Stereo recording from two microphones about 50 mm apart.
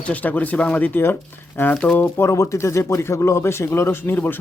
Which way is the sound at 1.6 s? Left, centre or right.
Left.